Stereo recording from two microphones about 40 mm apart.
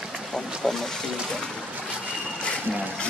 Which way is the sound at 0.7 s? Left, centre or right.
Centre.